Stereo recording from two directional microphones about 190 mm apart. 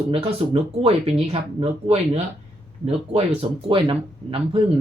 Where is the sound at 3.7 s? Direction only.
25° right (ahead or behind).